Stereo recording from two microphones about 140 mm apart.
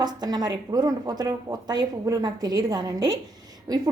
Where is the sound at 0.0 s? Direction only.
30° right (ahead or behind).